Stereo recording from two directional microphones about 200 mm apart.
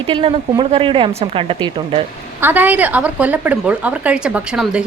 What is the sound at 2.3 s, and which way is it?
Speech, 10° right (ahead or behind).